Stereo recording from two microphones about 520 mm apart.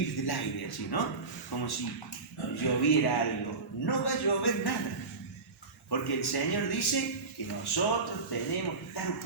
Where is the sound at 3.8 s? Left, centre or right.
Left.